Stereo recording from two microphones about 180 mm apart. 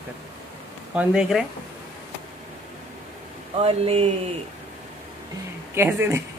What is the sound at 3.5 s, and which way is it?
Speech, 35° right (ahead or behind).